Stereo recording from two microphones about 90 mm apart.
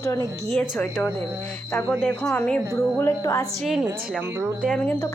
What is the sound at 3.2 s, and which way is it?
Speech, 40° left (ahead or behind).